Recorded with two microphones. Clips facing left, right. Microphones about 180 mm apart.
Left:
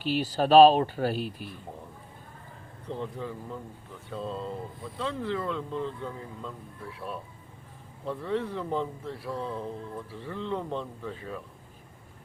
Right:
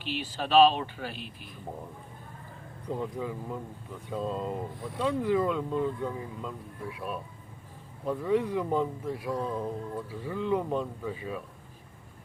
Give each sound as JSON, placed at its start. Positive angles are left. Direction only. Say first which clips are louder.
{"t": 0.0, "sound": "speech", "louder": "left 7 dB", "side_deg": 40}
{"t": 2.8, "sound": "speech", "louder": "right 2 dB", "side_deg": -10}